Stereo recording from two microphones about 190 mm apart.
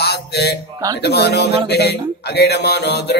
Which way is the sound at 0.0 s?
60° left (ahead or behind).